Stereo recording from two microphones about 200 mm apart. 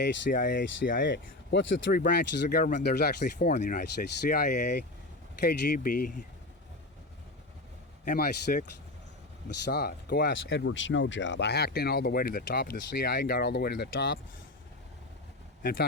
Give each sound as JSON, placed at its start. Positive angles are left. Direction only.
{"t": 0.0, "sound": "speech", "side_deg": 60}
{"t": 3.6, "sound": "speech", "side_deg": 40}
{"t": 4.3, "sound": "speech", "side_deg": 50}
{"t": 8.0, "sound": "speech", "side_deg": 45}
{"t": 9.6, "sound": "speech", "side_deg": 55}